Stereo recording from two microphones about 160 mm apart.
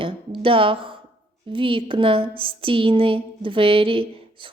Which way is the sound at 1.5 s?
35° right (ahead or behind).